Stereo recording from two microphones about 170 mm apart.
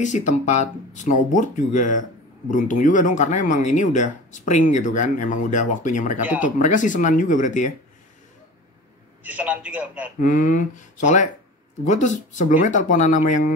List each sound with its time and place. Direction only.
0.0 s speech: 45° left (ahead or behind)
6.2 s speech: 10° right (ahead or behind)
6.6 s speech: 50° left (ahead or behind)
9.2 s speech: 10° right (ahead or behind)
10.2 s speech: 50° left (ahead or behind)